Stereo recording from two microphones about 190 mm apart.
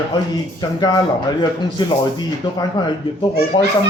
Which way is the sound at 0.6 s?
20° left (ahead or behind).